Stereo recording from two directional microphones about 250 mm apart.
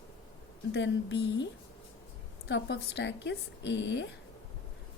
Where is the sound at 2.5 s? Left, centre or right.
Left.